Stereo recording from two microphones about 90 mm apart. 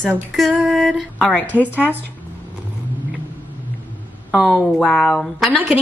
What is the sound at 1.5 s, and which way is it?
Speech, 20° right (ahead or behind).